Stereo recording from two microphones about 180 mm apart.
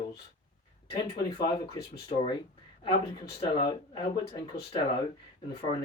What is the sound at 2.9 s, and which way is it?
Speech, 65° left (ahead or behind).